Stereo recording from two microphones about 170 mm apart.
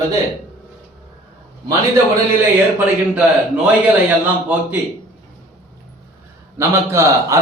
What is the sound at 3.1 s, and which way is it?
Speech, 5° right (ahead or behind).